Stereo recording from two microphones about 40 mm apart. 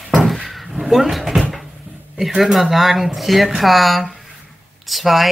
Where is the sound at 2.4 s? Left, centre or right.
Centre.